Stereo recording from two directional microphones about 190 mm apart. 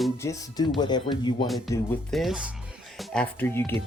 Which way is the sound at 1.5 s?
Centre (ahead or behind).